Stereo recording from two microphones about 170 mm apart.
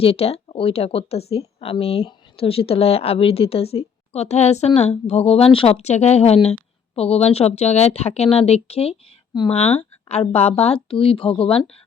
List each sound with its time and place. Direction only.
0.0 s speech: 35° left (ahead or behind)